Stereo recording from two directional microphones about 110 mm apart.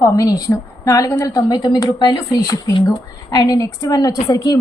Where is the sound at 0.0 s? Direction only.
30° left (ahead or behind).